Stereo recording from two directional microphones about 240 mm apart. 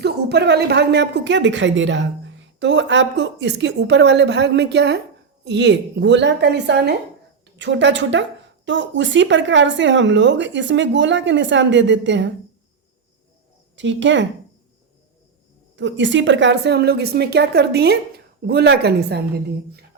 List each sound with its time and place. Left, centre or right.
0.0 s a woman's voice: right
13.7 s a woman's voice: right
15.7 s a woman's voice: right